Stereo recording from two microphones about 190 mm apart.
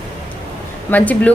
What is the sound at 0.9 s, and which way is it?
Speech, 10° left (ahead or behind).